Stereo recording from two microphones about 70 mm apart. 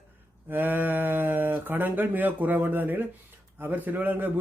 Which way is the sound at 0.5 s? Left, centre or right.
Right.